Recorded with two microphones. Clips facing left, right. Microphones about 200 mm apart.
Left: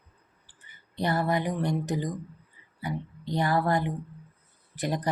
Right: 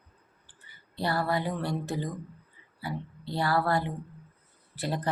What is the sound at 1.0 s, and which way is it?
A woman's voice, 20° left (ahead or behind).